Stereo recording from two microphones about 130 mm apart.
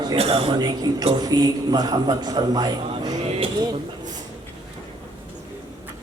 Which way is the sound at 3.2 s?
50° right (ahead or behind).